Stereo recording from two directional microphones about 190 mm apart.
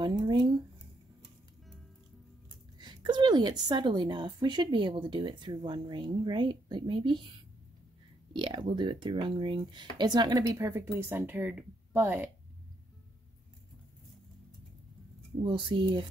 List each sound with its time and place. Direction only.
0.0 s speech: 20° right (ahead or behind)
2.8 s a woman's voice: 25° right (ahead or behind)
8.3 s a woman's voice: 25° right (ahead or behind); by 12.3 s 10° right (ahead or behind)
15.4 s a woman's voice: 25° right (ahead or behind)